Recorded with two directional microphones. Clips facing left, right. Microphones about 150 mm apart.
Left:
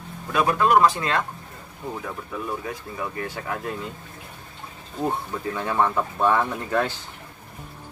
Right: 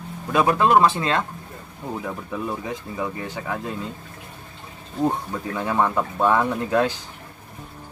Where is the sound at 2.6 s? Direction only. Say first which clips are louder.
Right 3 dB; 20° right (ahead or behind).